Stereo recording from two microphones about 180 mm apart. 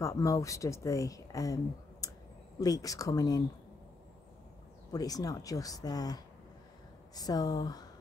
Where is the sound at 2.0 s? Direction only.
20° left (ahead or behind).